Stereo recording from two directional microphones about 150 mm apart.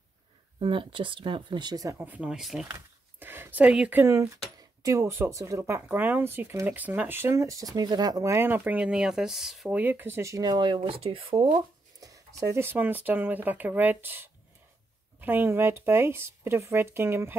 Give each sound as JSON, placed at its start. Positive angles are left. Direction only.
{"t": 0.6, "sound": "speech", "side_deg": -35}
{"t": 3.2, "sound": "speech", "side_deg": -15}
{"t": 12.0, "sound": "speech", "side_deg": -20}